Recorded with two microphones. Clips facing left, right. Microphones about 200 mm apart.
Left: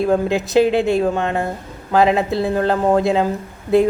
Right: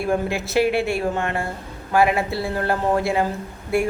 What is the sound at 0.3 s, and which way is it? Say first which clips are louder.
A woman's voice: left 5 dB; 20° left (ahead or behind).